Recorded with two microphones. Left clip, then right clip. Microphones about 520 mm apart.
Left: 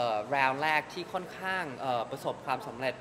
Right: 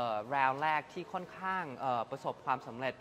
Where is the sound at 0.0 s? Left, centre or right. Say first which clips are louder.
Left 4 dB; right.